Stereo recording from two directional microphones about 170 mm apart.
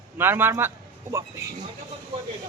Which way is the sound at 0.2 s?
15° right (ahead or behind).